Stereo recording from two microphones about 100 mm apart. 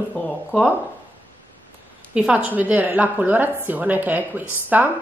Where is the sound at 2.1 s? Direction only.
15° right (ahead or behind).